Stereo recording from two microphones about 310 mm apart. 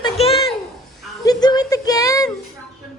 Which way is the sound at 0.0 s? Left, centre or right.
Centre.